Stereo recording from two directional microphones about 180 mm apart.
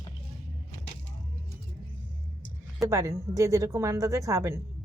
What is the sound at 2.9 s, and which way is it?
Speech, 15° right (ahead or behind).